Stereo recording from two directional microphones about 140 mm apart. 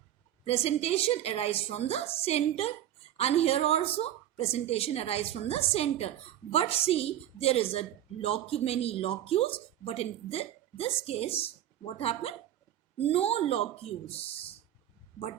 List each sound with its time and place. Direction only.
0.4 s a woman's voice: 45° left (ahead or behind)